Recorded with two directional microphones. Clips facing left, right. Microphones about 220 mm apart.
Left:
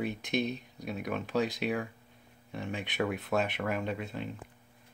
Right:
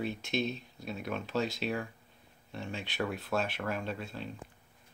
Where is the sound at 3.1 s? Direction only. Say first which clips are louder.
Left 3 dB; 20° left (ahead or behind).